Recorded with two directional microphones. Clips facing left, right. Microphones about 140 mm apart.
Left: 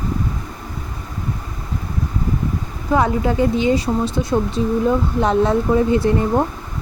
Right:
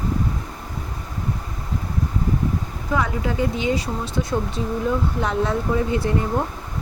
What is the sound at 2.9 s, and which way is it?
Speech, 30° left (ahead or behind).